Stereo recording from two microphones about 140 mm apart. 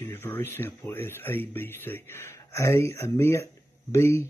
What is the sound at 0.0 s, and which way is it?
Speech, 15° left (ahead or behind).